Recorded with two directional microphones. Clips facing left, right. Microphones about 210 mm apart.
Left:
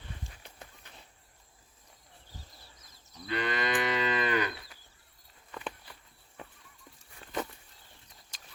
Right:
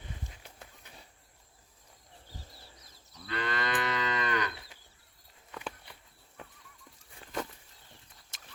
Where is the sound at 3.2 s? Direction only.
15° left (ahead or behind).